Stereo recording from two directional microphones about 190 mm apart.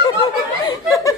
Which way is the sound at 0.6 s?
15° left (ahead or behind).